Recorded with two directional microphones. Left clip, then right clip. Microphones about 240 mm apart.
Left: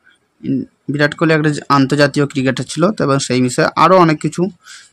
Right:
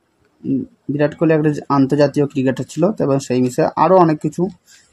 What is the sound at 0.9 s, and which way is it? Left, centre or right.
Speech, left.